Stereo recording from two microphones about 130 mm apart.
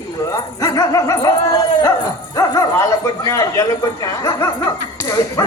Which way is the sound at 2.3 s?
25° left (ahead or behind).